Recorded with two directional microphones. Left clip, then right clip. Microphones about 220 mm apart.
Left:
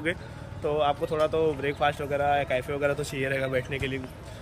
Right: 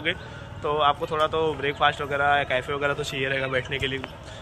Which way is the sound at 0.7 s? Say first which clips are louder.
Right 3 dB; 10° left (ahead or behind).